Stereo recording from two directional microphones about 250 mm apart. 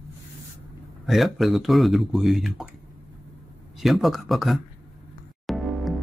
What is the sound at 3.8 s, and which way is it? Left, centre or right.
Speech, centre.